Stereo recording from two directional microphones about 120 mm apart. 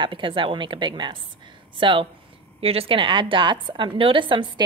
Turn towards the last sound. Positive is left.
turn(degrees=-45)  # may be behind; listen again after turning